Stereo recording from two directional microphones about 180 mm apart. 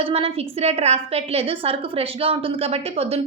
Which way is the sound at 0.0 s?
30° right (ahead or behind).